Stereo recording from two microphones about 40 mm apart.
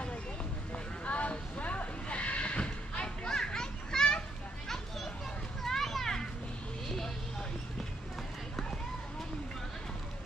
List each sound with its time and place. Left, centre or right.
1.0 s horse: left; by 4.2 s centre
4.6 s children playing: centre